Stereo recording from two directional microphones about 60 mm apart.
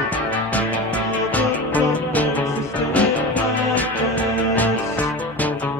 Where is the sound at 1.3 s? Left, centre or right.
Left.